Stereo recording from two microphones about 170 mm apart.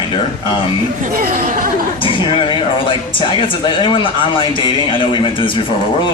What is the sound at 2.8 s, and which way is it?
Speech, 30° left (ahead or behind).